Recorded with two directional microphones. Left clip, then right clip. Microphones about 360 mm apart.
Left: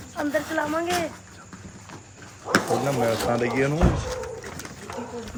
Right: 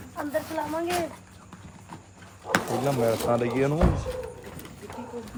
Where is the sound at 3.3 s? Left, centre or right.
Centre.